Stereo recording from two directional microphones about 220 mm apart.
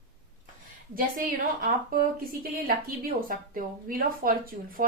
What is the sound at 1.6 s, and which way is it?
A woman's voice, 40° right (ahead or behind).